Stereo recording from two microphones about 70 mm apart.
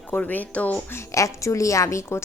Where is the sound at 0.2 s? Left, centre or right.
Left.